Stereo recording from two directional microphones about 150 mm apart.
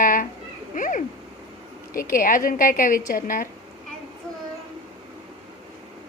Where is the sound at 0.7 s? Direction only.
60° left (ahead or behind).